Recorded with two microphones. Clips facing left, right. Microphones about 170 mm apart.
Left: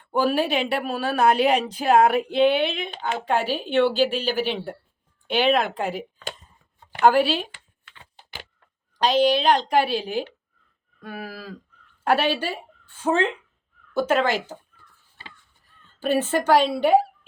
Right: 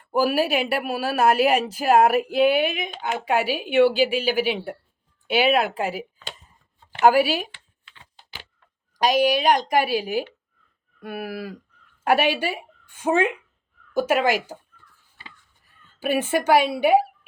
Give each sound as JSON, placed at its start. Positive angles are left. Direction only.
{"t": 0.0, "sound": "speech", "side_deg": -5}
{"t": 7.5, "sound": "typing", "side_deg": 50}
{"t": 9.0, "sound": "speech", "side_deg": -10}
{"t": 15.6, "sound": "speech", "side_deg": -10}